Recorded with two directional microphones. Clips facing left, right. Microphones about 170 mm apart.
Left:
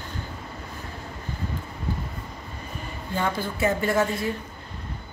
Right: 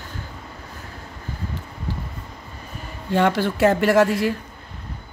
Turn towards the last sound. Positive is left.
turn(degrees=-80)